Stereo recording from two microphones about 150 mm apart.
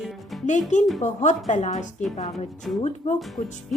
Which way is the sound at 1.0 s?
50° left (ahead or behind).